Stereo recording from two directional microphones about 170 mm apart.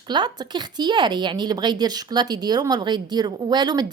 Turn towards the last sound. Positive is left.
turn(degrees=-25)  # may be behind; listen again after turning